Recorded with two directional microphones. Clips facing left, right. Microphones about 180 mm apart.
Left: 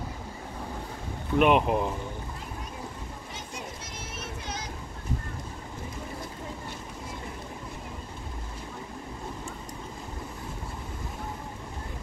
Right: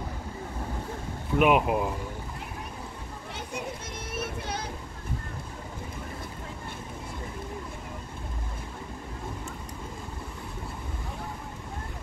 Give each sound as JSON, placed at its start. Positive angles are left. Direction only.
{"t": 1.3, "sound": "speech", "side_deg": -5}
{"t": 4.1, "sound": "child singing", "side_deg": -60}